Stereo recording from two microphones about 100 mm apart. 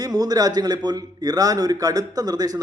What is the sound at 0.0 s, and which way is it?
Speech, 40° right (ahead or behind).